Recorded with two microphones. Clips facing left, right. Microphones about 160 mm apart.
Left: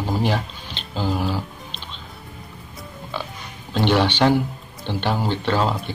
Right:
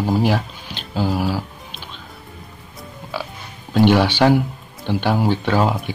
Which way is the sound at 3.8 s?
10° right (ahead or behind).